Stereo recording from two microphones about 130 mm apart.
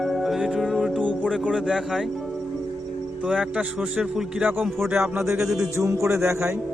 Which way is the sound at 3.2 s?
10° right (ahead or behind).